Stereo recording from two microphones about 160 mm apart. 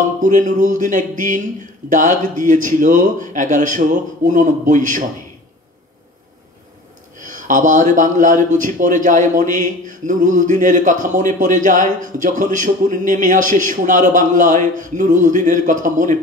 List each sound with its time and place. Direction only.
0.2 s speech: 50° right (ahead or behind)
7.2 s speech: 55° right (ahead or behind)